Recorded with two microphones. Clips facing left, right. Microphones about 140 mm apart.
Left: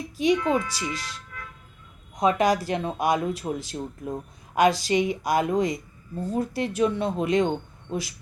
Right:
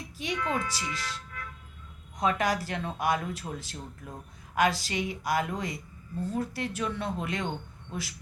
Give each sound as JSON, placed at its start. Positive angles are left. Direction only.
{"t": 0.2, "sound": "speech", "side_deg": 15}